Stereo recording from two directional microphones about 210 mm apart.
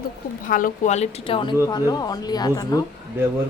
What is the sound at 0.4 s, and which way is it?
A woman's voice, 40° left (ahead or behind).